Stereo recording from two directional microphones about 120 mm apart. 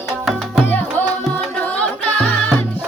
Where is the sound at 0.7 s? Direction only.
15° left (ahead or behind).